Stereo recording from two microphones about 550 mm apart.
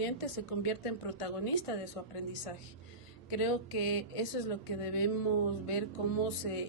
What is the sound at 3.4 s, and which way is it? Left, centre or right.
Speech, left.